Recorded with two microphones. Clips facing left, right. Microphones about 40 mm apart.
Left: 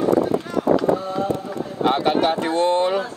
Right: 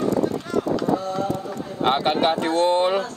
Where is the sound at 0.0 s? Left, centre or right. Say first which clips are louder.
Left 4 dB; centre.